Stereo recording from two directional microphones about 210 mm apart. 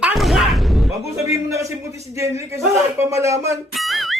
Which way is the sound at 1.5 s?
15° right (ahead or behind).